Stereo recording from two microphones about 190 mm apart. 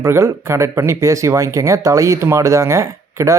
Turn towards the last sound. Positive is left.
turn(degrees=-15)  # may be behind; listen again after turning